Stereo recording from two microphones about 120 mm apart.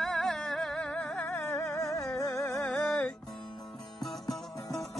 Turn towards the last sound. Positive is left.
turn(degrees=0)  # may be behind; listen again after turning